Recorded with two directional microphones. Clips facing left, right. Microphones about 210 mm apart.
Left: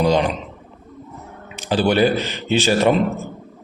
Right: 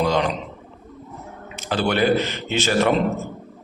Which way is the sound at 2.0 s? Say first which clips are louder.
Left 2 dB; 20° right (ahead or behind).